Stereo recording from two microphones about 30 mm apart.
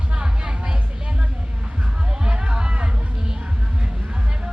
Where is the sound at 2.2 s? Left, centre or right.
Right.